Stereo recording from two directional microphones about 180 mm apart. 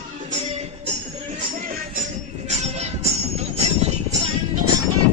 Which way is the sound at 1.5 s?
50° right (ahead or behind).